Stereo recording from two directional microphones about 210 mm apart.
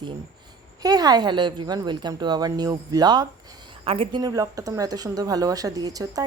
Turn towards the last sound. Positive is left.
turn(degrees=-15)  # may be behind; listen again after turning